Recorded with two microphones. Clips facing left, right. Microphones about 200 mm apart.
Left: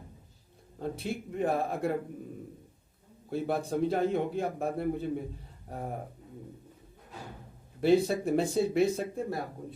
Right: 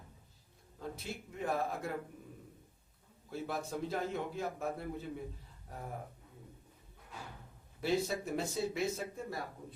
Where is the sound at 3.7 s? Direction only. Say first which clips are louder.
Left 9 dB; 55° left (ahead or behind).